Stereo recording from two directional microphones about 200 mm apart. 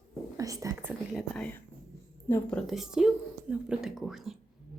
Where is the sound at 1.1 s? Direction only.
Centre (ahead or behind).